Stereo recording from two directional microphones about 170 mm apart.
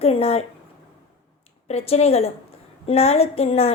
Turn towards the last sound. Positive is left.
turn(degrees=35)  # may be behind; listen again after turning